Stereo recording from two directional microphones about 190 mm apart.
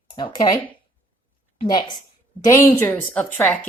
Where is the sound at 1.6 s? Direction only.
20° left (ahead or behind).